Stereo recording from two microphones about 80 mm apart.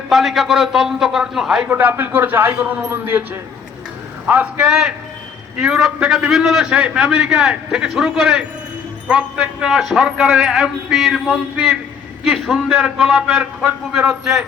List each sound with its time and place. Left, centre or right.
0.1 s a man's voice: centre
1.6 s a man's voice: right
4.3 s a man's voice: centre
4.7 s a man's voice: centre
13.3 s a man's voice: centre